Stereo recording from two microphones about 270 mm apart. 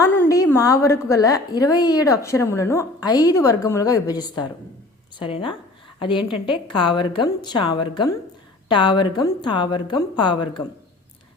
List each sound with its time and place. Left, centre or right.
0.0 s a woman's voice: centre